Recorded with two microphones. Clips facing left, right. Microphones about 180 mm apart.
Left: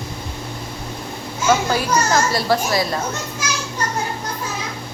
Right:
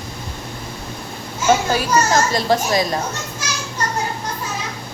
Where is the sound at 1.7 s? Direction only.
20° right (ahead or behind).